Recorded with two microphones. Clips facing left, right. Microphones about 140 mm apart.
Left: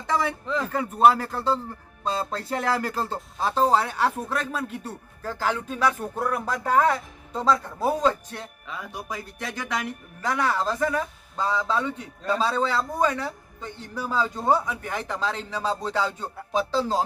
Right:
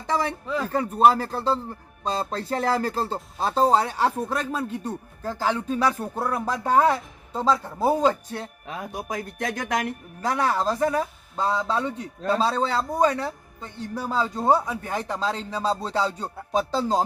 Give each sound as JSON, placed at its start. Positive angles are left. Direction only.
{"t": 0.1, "sound": "a man's voice", "side_deg": -30}
{"t": 0.4, "sound": "speech", "side_deg": -10}
{"t": 0.7, "sound": "a man's voice", "side_deg": -35}
{"t": 3.1, "sound": "speech", "side_deg": 0}
{"t": 3.5, "sound": "a man's voice", "side_deg": -35}
{"t": 8.6, "sound": "speech", "side_deg": -50}
{"t": 10.2, "sound": "a man's voice", "side_deg": -30}